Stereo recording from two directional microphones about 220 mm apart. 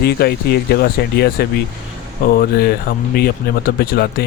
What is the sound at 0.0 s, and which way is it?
Speech, 45° left (ahead or behind).